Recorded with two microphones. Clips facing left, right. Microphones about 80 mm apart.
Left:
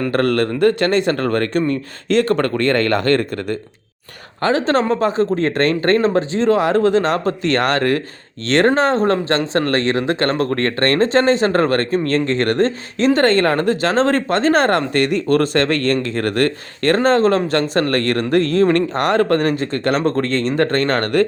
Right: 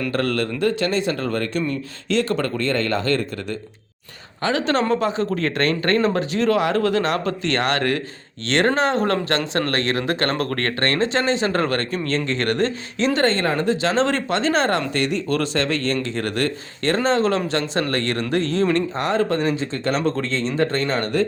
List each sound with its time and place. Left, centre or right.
0.1 s speech: left
4.4 s speech: left
13.1 s speech: left